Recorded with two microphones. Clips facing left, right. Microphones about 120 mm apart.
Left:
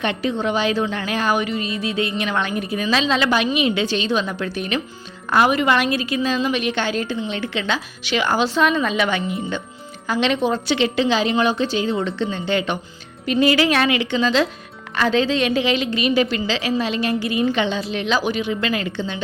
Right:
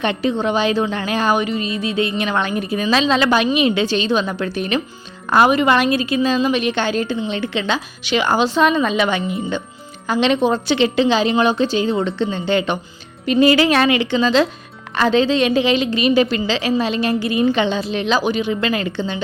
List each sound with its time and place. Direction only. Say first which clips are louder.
0.0 s a woman's voice: right 3 dB; 30° right (ahead or behind)